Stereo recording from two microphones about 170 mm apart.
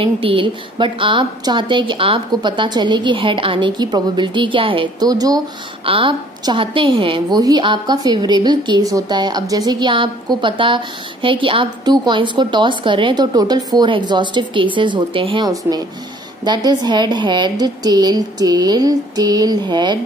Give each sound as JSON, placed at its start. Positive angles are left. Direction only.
{"t": 0.0, "sound": "a woman's voice", "side_deg": -30}